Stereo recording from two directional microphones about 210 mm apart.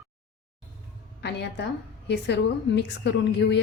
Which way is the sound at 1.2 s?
55° left (ahead or behind).